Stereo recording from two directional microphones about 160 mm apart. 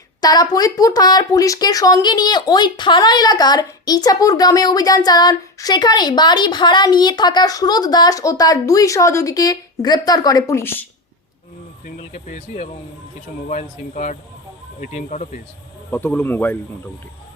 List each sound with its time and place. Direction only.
0.2 s speech: 25° left (ahead or behind)
11.9 s speech: 50° left (ahead or behind)
15.9 s speech: 10° left (ahead or behind)